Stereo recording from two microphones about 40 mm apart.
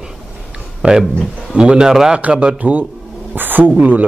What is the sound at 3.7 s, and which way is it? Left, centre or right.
Speech, right.